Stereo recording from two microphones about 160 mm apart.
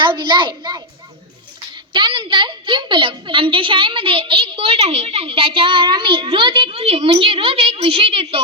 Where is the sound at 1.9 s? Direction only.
30° right (ahead or behind).